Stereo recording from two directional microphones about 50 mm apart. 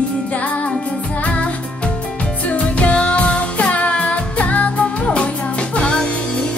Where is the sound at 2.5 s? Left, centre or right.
Left.